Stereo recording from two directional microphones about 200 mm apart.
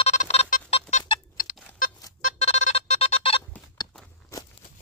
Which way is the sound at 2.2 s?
35° left (ahead or behind).